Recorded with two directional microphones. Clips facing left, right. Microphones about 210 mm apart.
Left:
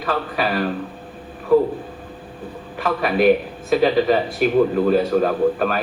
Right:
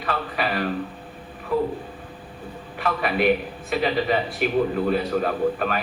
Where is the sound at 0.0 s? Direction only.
40° left (ahead or behind).